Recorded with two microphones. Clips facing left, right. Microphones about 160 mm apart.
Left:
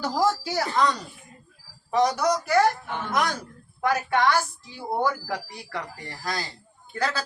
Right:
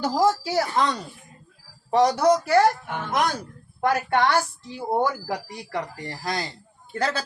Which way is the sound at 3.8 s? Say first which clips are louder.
Right 2 dB; 30° right (ahead or behind).